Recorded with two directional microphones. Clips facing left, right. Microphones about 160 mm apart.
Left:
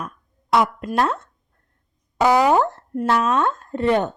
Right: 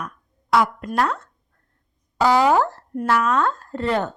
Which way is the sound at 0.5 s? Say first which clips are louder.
Left 1 dB; 20° left (ahead or behind).